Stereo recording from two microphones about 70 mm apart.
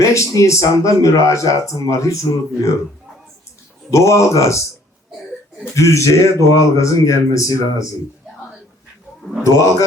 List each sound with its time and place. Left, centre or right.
0.0 s speech: left
3.9 s speech: left
5.7 s speech: left
9.4 s speech: left